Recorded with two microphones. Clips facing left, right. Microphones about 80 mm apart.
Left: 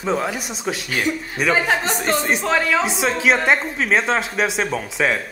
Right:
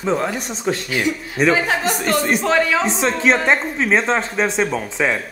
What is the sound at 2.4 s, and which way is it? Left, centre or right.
Speech, centre.